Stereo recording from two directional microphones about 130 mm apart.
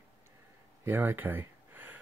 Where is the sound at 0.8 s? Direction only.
15° right (ahead or behind).